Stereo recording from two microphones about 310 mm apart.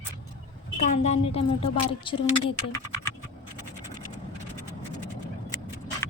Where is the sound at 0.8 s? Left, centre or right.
Left.